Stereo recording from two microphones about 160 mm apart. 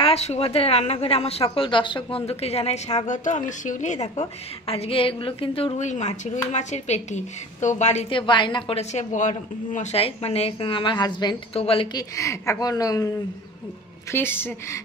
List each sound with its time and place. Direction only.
0.0 s a woman's voice: 40° left (ahead or behind)
8.1 s a woman's voice: 30° left (ahead or behind)
14.1 s a woman's voice: 15° left (ahead or behind)